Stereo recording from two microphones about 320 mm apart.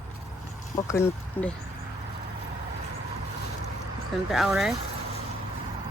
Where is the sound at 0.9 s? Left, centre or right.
Centre.